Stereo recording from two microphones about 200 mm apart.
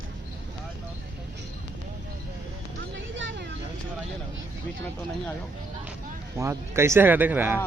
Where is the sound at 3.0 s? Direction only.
65° right (ahead or behind).